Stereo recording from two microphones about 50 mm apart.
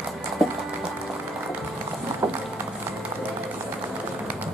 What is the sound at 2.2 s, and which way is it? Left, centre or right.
Run, right.